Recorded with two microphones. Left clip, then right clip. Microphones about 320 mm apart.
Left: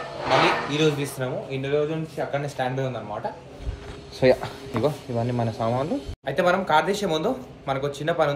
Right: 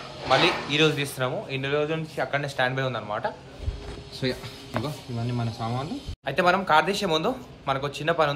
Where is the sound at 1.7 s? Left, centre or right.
Right.